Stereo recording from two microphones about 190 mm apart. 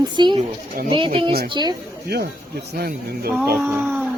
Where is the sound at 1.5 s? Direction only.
20° right (ahead or behind).